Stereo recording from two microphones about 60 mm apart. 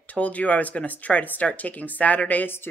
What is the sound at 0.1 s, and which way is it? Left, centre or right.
Speech, left.